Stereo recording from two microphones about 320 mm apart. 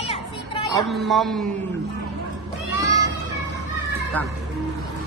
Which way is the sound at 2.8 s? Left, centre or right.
Centre.